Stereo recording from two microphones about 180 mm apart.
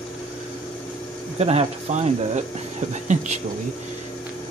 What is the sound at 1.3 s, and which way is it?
Speech, 35° right (ahead or behind).